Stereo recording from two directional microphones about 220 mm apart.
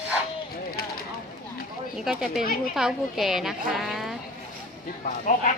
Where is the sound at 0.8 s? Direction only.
45° left (ahead or behind).